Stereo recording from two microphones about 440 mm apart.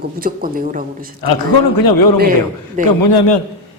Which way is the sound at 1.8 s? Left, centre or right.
Left.